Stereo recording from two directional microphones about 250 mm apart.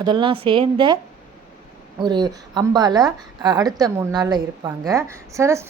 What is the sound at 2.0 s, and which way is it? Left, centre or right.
Speech, centre.